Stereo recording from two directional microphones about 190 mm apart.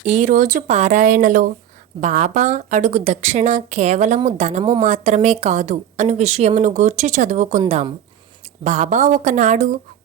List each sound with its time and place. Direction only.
0.0 s a woman's voice: 40° right (ahead or behind)